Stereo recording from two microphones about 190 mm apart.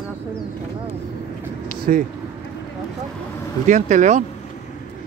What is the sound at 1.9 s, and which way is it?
Speech, 45° right (ahead or behind).